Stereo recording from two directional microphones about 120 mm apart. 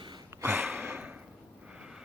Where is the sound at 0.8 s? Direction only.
10° right (ahead or behind).